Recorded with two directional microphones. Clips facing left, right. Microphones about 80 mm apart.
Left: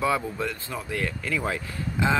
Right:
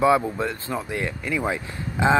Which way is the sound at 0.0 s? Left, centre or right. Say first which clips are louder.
Right 6 dB; right.